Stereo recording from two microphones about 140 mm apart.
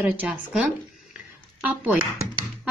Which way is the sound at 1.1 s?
10° right (ahead or behind).